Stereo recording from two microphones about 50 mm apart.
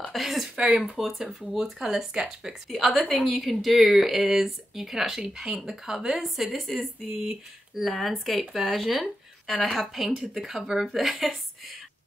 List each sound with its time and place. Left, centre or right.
0.0 s a sound: centre
0.6 s speech: centre
0.9 s speech: centre
10.1 s speech: centre